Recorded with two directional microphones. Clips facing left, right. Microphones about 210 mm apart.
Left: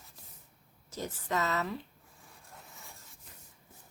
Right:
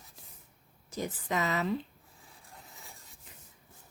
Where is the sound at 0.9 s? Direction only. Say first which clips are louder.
Right 1 dB; 15° right (ahead or behind).